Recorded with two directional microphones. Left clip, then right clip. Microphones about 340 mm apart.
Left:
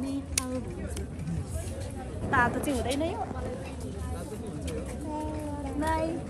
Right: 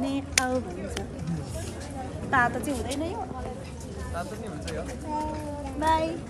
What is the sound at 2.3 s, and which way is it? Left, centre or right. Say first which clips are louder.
Speech: right 2 dB; centre.